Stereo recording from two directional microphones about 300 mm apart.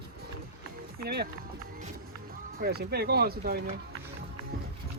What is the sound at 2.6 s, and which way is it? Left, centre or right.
Speech, right.